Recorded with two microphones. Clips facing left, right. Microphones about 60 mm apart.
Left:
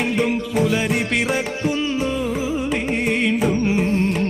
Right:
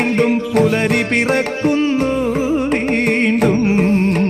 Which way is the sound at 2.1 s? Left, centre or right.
Right.